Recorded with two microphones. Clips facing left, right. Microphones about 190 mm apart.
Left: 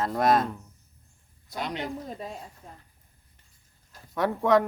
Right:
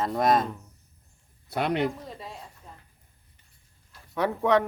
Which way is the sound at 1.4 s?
60° right (ahead or behind).